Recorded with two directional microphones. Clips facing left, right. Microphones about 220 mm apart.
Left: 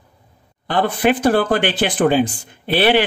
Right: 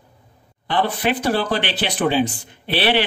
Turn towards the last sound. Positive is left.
turn(degrees=50)  # may be behind; listen again after turning